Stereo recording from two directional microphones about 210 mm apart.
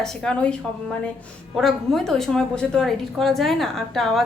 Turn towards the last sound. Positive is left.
turn(degrees=0)  # may be behind; listen again after turning